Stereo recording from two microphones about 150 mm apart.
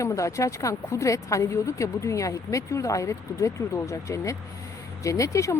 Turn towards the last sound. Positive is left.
turn(degrees=20)  # may be behind; listen again after turning